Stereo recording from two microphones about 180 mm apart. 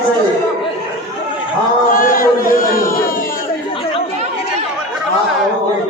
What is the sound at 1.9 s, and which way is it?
Chant, 50° left (ahead or behind).